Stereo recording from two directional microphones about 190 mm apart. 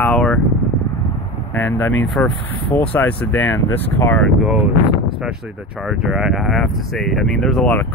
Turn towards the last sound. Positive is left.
turn(degrees=5)  # may be behind; listen again after turning